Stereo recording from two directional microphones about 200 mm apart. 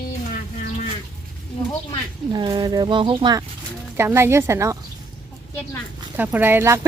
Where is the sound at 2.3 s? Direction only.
20° right (ahead or behind).